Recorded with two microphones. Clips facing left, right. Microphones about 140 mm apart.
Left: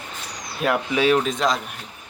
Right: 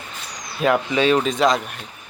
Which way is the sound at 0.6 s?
5° left (ahead or behind).